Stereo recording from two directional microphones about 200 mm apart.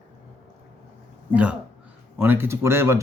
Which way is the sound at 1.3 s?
5° right (ahead or behind).